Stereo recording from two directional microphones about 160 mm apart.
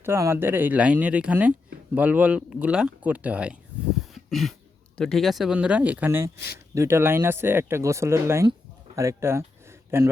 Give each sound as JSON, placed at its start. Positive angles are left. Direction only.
{"t": 0.0, "sound": "speech", "side_deg": -15}
{"t": 4.0, "sound": "cough", "side_deg": 0}
{"t": 4.9, "sound": "speech", "side_deg": 0}